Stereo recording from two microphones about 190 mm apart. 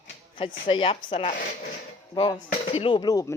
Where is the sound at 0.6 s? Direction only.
30° left (ahead or behind).